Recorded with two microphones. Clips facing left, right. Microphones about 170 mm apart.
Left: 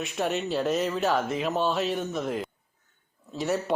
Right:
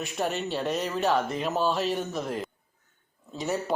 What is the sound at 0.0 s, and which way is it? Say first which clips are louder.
Speech: left 1 dB; centre (ahead or behind).